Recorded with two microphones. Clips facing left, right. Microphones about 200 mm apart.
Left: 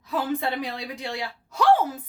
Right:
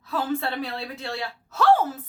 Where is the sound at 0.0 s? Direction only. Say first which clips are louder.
Even; 15° left (ahead or behind).